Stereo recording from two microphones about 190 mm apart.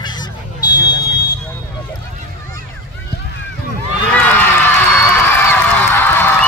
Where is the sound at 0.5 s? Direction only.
20° left (ahead or behind).